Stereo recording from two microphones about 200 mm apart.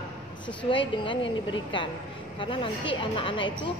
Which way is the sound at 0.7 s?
25° left (ahead or behind).